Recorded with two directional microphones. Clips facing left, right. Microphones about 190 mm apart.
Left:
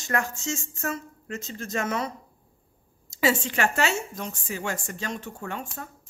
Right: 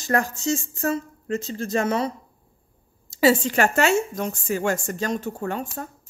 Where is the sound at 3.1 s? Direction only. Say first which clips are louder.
Right 6 dB; 35° right (ahead or behind).